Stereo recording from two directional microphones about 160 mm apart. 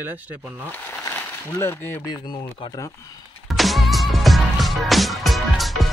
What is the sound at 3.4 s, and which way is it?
Music, centre (ahead or behind).